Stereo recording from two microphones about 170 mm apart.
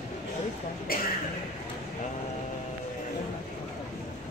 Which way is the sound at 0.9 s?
60° left (ahead or behind).